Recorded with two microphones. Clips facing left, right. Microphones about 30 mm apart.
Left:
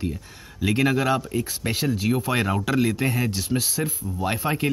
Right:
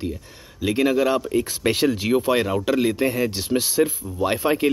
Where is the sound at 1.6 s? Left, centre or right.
Right.